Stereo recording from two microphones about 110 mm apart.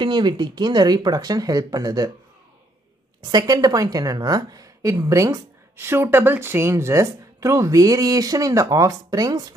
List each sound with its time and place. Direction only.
0.0 s a woman's voice: 45° right (ahead or behind)
3.2 s a woman's voice: 35° right (ahead or behind)